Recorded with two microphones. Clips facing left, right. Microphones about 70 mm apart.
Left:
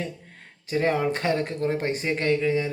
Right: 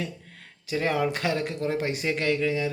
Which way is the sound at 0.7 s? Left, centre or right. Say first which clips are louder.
Left 2 dB; left.